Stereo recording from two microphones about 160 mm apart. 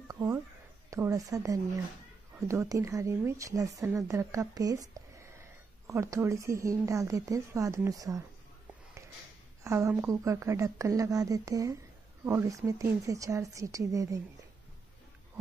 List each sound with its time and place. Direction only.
0.1 s a sound: 20° right (ahead or behind)
0.8 s a woman's voice: 20° right (ahead or behind)
9.6 s a woman's voice: 20° right (ahead or behind)